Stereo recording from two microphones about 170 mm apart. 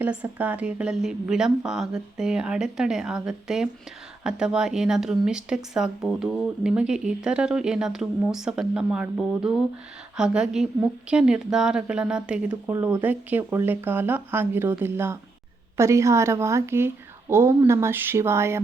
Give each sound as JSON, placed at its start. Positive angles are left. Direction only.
{"t": 0.0, "sound": "speech", "side_deg": -10}